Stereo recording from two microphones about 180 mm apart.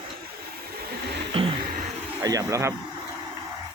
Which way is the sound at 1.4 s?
30° right (ahead or behind).